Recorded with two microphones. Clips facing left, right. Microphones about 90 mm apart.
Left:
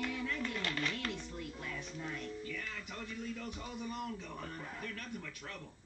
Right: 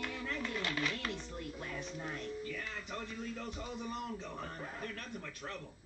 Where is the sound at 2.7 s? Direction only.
35° right (ahead or behind).